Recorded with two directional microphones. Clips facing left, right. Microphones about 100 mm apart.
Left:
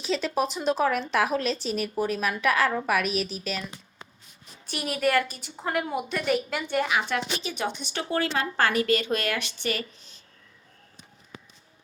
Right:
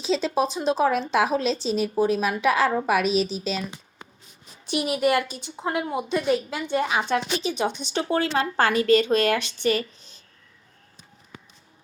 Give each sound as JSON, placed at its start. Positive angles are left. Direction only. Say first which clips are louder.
{"t": 0.0, "sound": "speech", "louder": "right 3 dB", "side_deg": -20}
{"t": 5.6, "sound": "speech", "louder": "right 3 dB", "side_deg": -10}
{"t": 6.0, "sound": "speech", "louder": "right 3 dB", "side_deg": -20}